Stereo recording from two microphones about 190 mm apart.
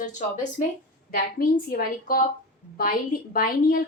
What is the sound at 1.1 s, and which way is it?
A woman's voice, 50° left (ahead or behind).